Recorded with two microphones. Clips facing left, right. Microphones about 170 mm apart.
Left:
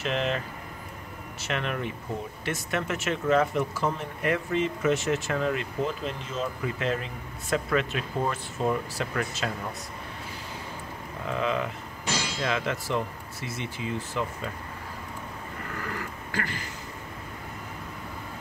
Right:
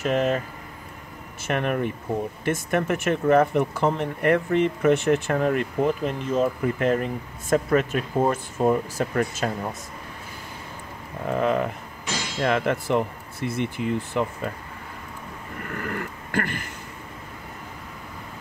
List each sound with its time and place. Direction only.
0.0 s speech: 45° right (ahead or behind)
1.4 s speech: 50° right (ahead or behind)
11.2 s speech: 50° right (ahead or behind)
15.7 s a sound: 55° right (ahead or behind)